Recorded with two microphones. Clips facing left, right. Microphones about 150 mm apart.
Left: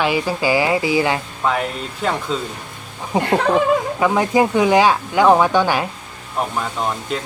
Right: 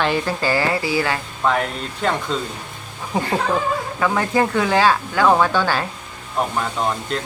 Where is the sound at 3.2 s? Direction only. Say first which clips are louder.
Left 4 dB; 65° left (ahead or behind).